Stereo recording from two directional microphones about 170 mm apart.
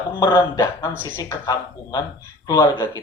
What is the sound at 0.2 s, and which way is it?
Speech, 25° left (ahead or behind).